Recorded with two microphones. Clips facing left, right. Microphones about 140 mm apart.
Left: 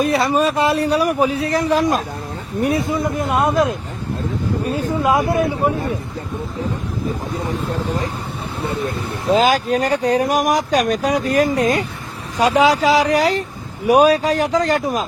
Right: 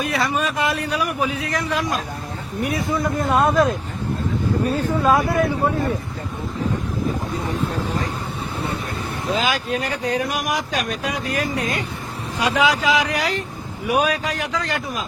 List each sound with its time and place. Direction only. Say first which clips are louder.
0.0 s speech: left 6 dB; 35° left (ahead or behind)
2.8 s speech: left 1 dB; 20° left (ahead or behind)
4.7 s speech: left 1 dB; 15° left (ahead or behind)
9.3 s speech: left 8 dB; 40° left (ahead or behind)